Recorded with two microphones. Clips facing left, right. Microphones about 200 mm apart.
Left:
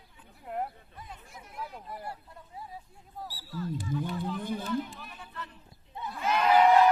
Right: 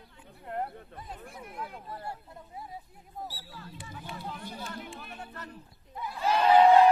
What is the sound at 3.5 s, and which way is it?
Speech, 40° left (ahead or behind).